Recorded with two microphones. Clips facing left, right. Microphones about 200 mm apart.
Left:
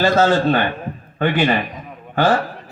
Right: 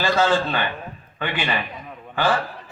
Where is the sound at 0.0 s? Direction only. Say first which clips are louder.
Left 5 dB; 40° left (ahead or behind).